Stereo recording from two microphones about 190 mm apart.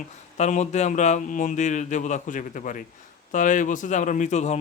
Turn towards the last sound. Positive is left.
turn(degrees=35)  # may be behind; listen again after turning